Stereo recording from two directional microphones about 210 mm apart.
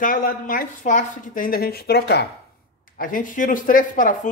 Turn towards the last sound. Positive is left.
turn(degrees=40)  # may be behind; listen again after turning